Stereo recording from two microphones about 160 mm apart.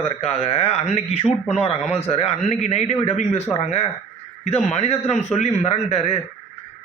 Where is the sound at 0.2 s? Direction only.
40° left (ahead or behind).